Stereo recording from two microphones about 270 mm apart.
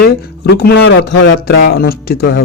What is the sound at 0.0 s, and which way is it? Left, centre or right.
Speech, left.